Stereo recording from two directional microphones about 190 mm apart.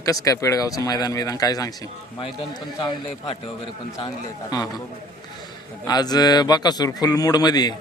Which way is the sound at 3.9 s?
20° left (ahead or behind).